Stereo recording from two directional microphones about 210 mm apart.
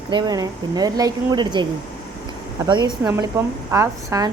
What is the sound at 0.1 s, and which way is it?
A woman's voice, 20° right (ahead or behind).